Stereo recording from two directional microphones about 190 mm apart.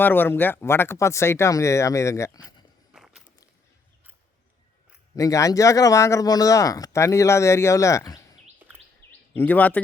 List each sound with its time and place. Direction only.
0.0 s speech: 10° left (ahead or behind)
2.9 s walk: 5° right (ahead or behind)
5.1 s speech: 15° left (ahead or behind)
9.3 s speech: 10° left (ahead or behind)